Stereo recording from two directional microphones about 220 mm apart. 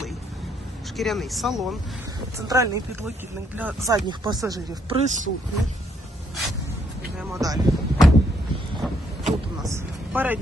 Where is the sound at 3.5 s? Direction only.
10° right (ahead or behind).